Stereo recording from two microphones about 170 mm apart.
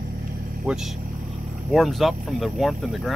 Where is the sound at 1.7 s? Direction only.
Centre (ahead or behind).